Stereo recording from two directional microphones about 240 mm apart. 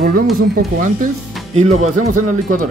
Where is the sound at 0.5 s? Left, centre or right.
Right.